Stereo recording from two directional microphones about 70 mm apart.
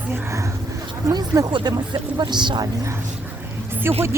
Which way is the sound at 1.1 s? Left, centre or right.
Right.